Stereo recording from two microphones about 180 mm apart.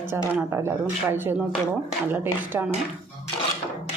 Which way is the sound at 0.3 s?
10° right (ahead or behind).